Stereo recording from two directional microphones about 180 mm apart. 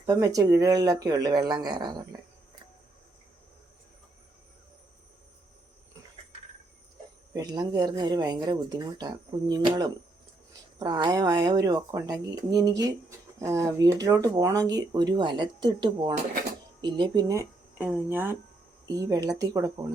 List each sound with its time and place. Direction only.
0.0 s speech: 20° right (ahead or behind)
7.3 s speech: 20° right (ahead or behind)